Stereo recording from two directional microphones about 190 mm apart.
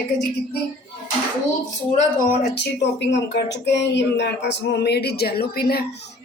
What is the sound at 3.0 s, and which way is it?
Speech, 65° left (ahead or behind).